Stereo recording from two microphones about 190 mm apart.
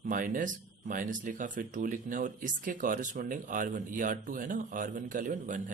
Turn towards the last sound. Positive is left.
turn(degrees=-45)  # may be behind; listen again after turning